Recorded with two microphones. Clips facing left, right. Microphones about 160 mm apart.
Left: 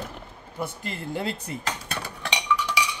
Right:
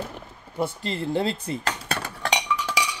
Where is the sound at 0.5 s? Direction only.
30° right (ahead or behind).